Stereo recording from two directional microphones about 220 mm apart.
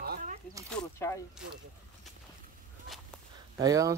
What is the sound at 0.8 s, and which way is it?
Speech, 10° left (ahead or behind).